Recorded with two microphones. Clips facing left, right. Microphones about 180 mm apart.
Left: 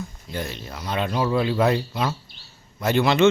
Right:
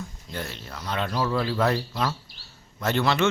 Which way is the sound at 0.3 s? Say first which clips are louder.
Left 4 dB; 15° left (ahead or behind).